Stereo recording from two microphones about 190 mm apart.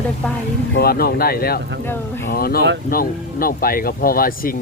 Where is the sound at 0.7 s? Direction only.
55° left (ahead or behind).